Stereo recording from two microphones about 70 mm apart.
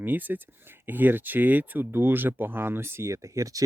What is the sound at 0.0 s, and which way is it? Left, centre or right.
Speech, right.